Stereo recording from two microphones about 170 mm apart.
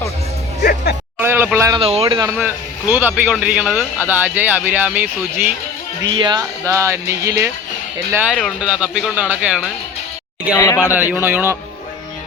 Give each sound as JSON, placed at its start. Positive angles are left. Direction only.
{"t": 0.6, "sound": "music", "side_deg": 65}
{"t": 1.2, "sound": "a sound", "side_deg": -10}
{"t": 1.5, "sound": "speech", "side_deg": -20}
{"t": 1.8, "sound": "a man's voice", "side_deg": -35}
{"t": 2.9, "sound": "speech", "side_deg": -10}
{"t": 6.1, "sound": "speech", "side_deg": -30}
{"t": 6.7, "sound": "speech", "side_deg": -15}
{"t": 8.1, "sound": "speech", "side_deg": -5}
{"t": 10.5, "sound": "speech", "side_deg": 20}
{"t": 10.9, "sound": "speech", "side_deg": -10}